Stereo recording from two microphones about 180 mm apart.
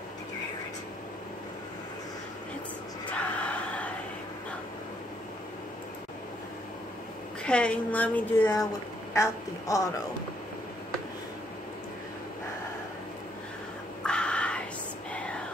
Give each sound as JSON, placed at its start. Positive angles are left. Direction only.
{"t": 3.1, "sound": "a sound", "side_deg": 5}
{"t": 7.4, "sound": "a woman's voice", "side_deg": 5}
{"t": 14.0, "sound": "crow", "side_deg": 5}
{"t": 15.1, "sound": "whispering", "side_deg": 5}